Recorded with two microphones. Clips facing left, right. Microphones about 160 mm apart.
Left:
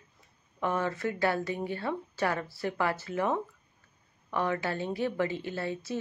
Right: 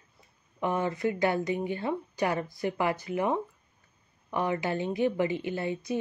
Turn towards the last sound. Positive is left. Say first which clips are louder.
# right 3 dB
turn(degrees=-15)  # may be behind; listen again after turning